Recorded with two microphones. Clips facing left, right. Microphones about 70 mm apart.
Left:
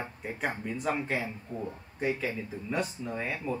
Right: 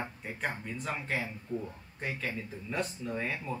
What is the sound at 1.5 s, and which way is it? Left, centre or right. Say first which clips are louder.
Speech: right 2 dB; left.